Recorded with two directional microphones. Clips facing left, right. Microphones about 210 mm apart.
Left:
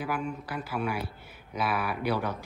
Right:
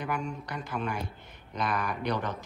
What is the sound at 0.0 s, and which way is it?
Speech, 5° left (ahead or behind).